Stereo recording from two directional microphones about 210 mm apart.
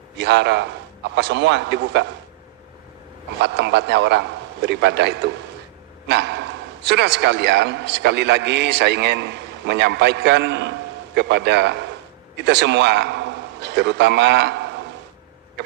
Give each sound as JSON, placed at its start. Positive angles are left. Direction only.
{"t": 0.2, "sound": "a man's voice", "side_deg": -55}
{"t": 3.4, "sound": "a man's voice", "side_deg": -55}